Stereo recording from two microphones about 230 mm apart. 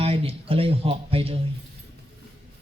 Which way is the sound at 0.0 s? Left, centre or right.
Right.